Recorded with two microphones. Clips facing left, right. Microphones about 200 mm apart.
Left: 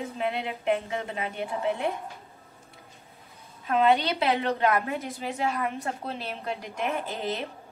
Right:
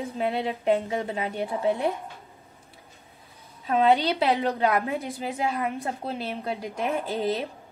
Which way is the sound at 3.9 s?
30° right (ahead or behind).